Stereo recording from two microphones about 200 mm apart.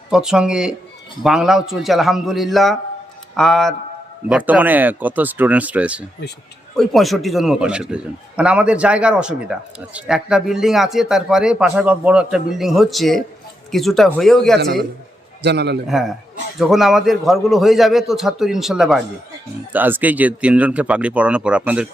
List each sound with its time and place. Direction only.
0.1 s a man's voice: 5° right (ahead or behind)
15.4 s a man's voice: 55° right (ahead or behind)
15.9 s a man's voice: centre (ahead or behind)